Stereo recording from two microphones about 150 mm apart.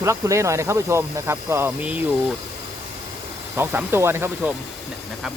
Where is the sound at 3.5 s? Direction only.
15° right (ahead or behind).